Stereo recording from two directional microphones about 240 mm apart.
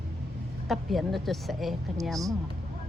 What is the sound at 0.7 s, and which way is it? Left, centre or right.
A woman's voice, centre.